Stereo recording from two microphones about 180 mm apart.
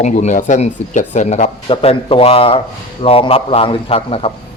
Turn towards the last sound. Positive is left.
turn(degrees=30)  # may be behind; listen again after turning